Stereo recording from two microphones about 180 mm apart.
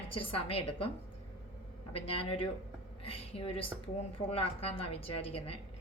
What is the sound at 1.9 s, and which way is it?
A woman's voice, 30° left (ahead or behind).